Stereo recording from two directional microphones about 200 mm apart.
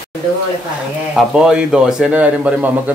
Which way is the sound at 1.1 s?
5° right (ahead or behind).